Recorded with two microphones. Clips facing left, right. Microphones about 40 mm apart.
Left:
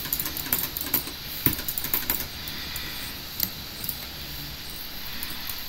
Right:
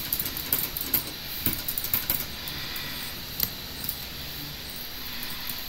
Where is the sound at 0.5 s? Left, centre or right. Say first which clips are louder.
Left 3 dB; left.